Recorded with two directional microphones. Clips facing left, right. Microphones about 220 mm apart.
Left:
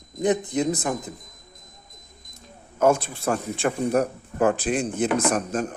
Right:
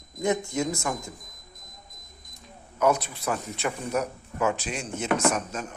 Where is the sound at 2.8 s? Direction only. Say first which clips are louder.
Left 4 dB; 50° left (ahead or behind).